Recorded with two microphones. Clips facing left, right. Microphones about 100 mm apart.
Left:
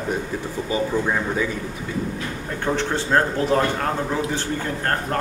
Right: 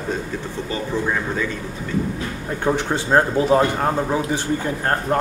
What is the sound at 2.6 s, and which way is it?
A man's voice, 15° right (ahead or behind).